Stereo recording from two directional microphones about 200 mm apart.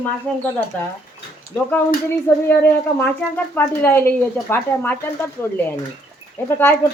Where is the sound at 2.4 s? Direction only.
10° left (ahead or behind).